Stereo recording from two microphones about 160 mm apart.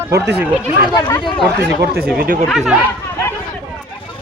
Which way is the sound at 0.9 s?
25° left (ahead or behind).